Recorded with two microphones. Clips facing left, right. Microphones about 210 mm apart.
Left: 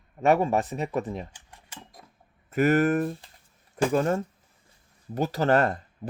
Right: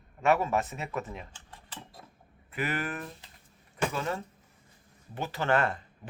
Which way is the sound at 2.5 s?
45° left (ahead or behind).